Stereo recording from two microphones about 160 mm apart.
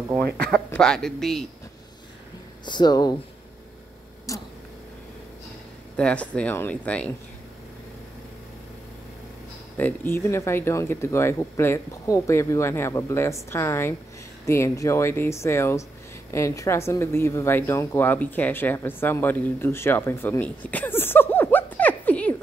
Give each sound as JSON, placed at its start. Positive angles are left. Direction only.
{"t": 0.5, "sound": "speech", "side_deg": 5}
{"t": 2.6, "sound": "speech", "side_deg": 30}
{"t": 4.3, "sound": "speech", "side_deg": 20}
{"t": 5.9, "sound": "speech", "side_deg": 5}
{"t": 9.8, "sound": "speech", "side_deg": 10}